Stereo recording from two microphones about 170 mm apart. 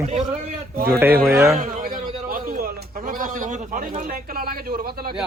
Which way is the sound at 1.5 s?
50° right (ahead or behind).